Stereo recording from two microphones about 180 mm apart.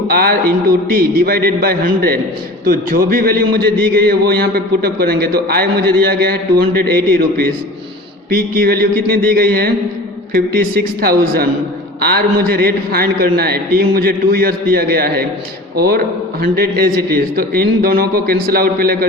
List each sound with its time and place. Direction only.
0.1 s a man's voice: 55° right (ahead or behind)
8.3 s a man's voice: 55° right (ahead or behind)